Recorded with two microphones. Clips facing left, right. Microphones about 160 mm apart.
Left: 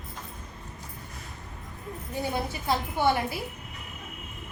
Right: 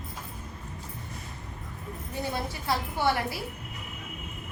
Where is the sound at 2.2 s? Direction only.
20° left (ahead or behind).